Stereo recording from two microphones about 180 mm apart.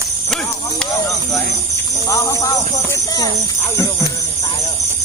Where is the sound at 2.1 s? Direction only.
20° left (ahead or behind).